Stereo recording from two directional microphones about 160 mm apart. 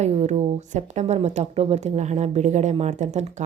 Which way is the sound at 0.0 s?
45° right (ahead or behind).